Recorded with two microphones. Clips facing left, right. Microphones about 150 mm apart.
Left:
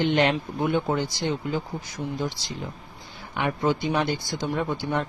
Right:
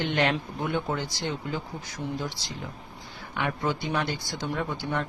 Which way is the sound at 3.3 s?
25° left (ahead or behind).